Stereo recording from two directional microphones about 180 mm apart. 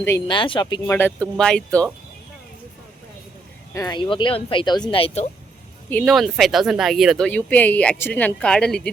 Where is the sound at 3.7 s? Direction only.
25° left (ahead or behind).